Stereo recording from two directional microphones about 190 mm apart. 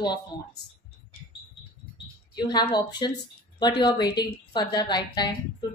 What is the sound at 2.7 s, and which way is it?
A woman's voice, 20° left (ahead or behind).